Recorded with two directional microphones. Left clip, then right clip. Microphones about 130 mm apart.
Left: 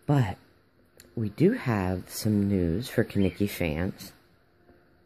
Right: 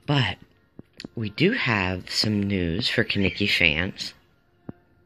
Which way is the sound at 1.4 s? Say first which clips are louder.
Right 4 dB; 35° left (ahead or behind).